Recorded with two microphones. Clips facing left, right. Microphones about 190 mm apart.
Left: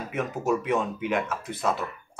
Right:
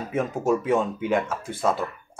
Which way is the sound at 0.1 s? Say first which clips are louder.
Right 3 dB; 30° right (ahead or behind).